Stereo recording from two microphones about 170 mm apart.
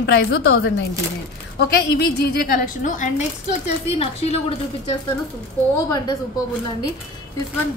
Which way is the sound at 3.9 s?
35° left (ahead or behind).